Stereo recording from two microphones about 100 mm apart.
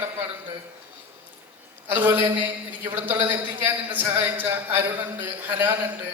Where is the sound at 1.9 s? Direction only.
20° right (ahead or behind).